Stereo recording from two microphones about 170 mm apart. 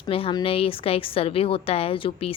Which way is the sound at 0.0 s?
35° left (ahead or behind).